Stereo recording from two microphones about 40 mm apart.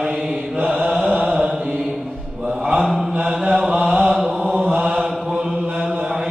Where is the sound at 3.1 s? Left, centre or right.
Right.